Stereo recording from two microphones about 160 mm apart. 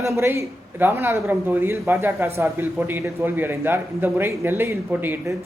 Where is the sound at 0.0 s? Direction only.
15° right (ahead or behind).